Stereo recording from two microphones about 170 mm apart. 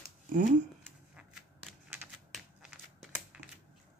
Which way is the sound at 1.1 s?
5° right (ahead or behind).